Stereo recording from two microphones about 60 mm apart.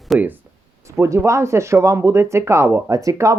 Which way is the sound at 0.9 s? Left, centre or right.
Right.